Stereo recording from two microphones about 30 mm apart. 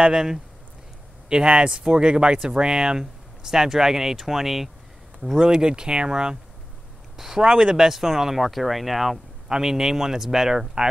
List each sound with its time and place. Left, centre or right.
0.0 s speech: centre
1.3 s speech: right; by 5.6 s centre
5.6 s speech: right
7.3 s speech: right; by 9.2 s centre
9.5 s speech: centre